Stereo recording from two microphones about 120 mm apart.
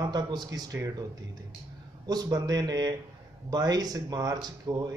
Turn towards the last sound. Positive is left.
turn(degrees=-35)  # may be behind; listen again after turning